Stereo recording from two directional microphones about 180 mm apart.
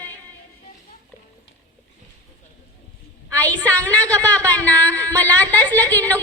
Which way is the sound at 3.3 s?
10° left (ahead or behind).